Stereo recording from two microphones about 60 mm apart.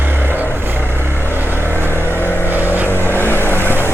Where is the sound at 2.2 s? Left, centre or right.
Left.